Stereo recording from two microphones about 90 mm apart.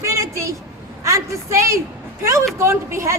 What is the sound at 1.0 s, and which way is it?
A woman's voice, 35° right (ahead or behind).